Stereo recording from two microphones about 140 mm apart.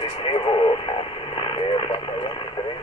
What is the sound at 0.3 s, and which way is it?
Radio, 35° left (ahead or behind).